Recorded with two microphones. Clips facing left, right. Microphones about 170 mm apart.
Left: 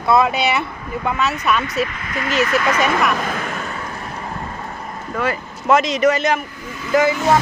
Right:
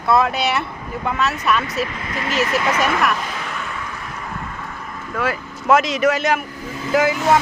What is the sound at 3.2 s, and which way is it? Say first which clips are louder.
Vehicle: left 4 dB; 50° left (ahead or behind).